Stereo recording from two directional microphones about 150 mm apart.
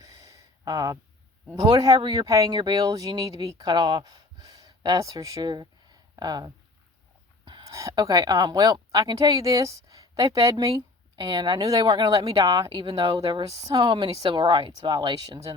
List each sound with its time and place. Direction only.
0.0 s a sound: 20° right (ahead or behind)
1.5 s a woman's voice: 25° right (ahead or behind)
13.1 s speech: 25° right (ahead or behind)
13.7 s speech: 35° right (ahead or behind)